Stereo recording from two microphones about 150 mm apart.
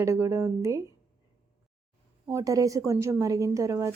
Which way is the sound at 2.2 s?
20° right (ahead or behind).